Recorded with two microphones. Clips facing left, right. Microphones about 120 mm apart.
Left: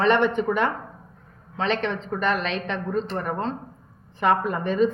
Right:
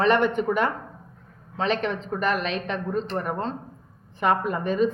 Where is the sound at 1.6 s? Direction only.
10° right (ahead or behind).